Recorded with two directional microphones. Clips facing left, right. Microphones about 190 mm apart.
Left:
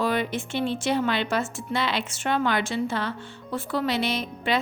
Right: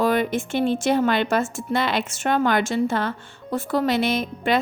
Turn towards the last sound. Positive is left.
turn(degrees=-50)  # may be behind; listen again after turning